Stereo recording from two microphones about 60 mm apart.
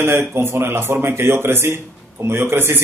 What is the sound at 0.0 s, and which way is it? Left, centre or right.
A man's voice, right.